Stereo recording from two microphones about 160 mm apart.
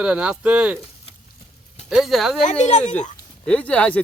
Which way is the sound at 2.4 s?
45° left (ahead or behind).